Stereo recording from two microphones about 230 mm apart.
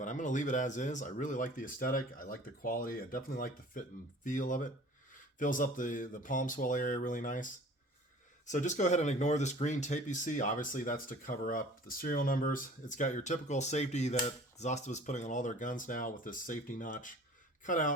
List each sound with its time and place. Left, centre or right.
0.0 s speech: left